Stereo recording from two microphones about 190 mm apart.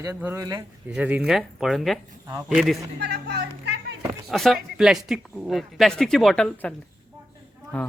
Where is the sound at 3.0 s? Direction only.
60° right (ahead or behind).